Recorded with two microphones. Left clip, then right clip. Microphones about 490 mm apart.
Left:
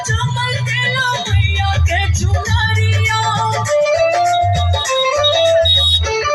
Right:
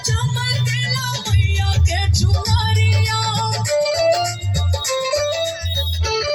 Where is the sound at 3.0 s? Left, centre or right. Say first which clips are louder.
Left 7 dB; right.